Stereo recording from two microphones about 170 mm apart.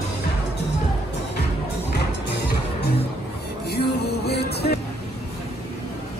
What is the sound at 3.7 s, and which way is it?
Music, 75° left (ahead or behind).